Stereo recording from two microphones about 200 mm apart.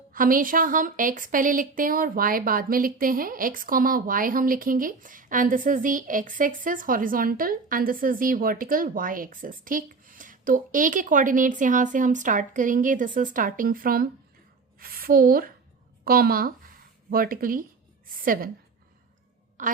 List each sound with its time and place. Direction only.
0.1 s a woman's voice: 45° right (ahead or behind)
16.0 s a sound: 50° right (ahead or behind)
19.6 s speech: 40° right (ahead or behind)